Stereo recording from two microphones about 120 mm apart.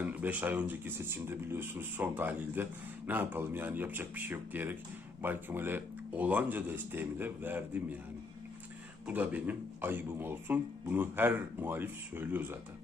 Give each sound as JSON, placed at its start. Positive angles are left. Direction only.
{"t": 0.0, "sound": "speech", "side_deg": -15}
{"t": 9.0, "sound": "speech", "side_deg": -15}